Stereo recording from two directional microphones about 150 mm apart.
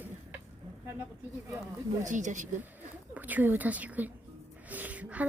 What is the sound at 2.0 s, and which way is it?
Speech, 55° right (ahead or behind).